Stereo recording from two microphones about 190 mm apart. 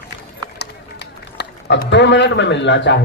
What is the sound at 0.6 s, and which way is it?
Run, 60° left (ahead or behind).